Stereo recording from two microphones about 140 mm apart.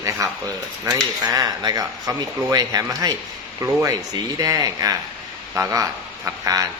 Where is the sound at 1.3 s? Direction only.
25° right (ahead or behind).